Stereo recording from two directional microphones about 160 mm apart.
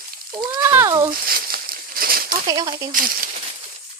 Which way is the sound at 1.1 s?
70° right (ahead or behind).